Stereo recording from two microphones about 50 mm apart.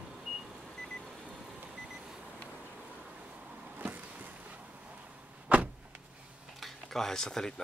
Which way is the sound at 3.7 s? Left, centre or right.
Right.